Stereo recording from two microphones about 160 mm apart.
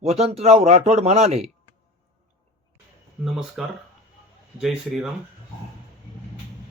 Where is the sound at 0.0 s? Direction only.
40° right (ahead or behind).